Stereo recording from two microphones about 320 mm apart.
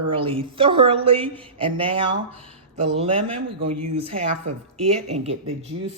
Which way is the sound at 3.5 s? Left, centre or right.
Right.